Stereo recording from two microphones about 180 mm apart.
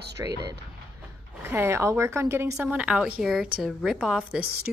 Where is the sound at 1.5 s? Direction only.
15° right (ahead or behind).